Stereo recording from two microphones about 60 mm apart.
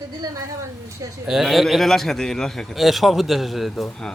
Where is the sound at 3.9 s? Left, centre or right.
Centre.